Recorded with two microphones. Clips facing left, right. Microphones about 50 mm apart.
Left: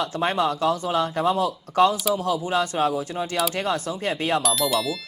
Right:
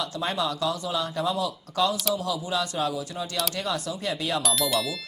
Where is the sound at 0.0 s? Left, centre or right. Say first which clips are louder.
Left 5 dB; left.